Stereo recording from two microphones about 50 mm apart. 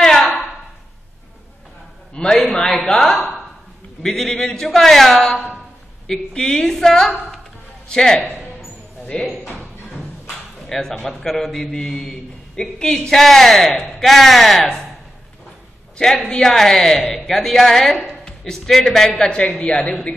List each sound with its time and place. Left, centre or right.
0.0 s a sound: centre
2.1 s a man's voice: centre
9.5 s music: centre
10.7 s a man's voice: centre
16.0 s a man's voice: centre
19.1 s a man's voice: centre